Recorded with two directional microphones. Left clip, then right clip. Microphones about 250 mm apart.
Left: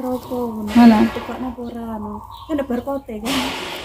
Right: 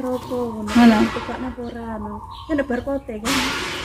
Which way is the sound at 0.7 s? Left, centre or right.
Centre.